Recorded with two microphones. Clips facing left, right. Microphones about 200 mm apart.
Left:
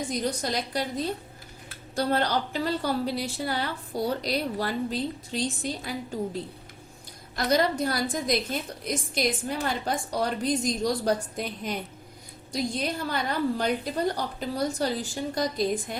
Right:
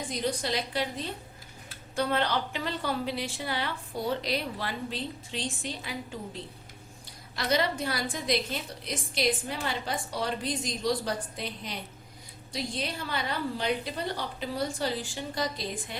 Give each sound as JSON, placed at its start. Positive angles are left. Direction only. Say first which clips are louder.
{"t": 0.1, "sound": "a woman's voice", "louder": "right 2 dB", "side_deg": 45}
{"t": 7.3, "sound": "a woman's voice", "louder": "left 4 dB", "side_deg": 45}